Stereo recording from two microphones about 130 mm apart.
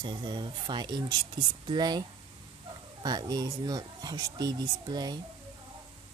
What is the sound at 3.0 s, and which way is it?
Speech, 30° right (ahead or behind).